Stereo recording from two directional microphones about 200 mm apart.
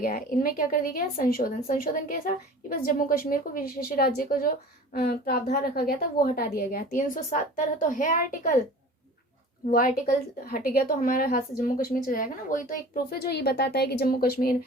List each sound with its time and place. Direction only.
0.0 s a woman's voice: 45° left (ahead or behind)
9.7 s a woman's voice: 45° left (ahead or behind)